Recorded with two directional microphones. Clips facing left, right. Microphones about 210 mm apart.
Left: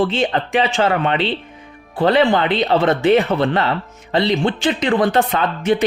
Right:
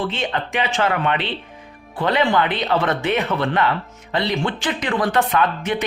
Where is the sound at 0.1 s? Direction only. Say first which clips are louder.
Left 6 dB; 30° left (ahead or behind).